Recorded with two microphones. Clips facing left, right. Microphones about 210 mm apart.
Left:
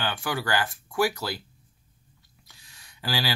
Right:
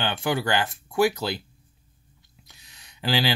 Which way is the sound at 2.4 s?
20° right (ahead or behind).